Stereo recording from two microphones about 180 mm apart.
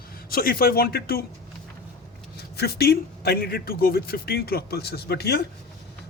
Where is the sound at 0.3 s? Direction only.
55° left (ahead or behind).